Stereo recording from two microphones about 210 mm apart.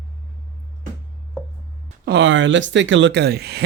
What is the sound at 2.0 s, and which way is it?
Speech, 60° right (ahead or behind).